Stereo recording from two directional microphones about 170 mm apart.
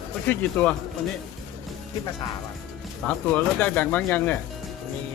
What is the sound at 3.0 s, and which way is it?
Speech, 10° left (ahead or behind).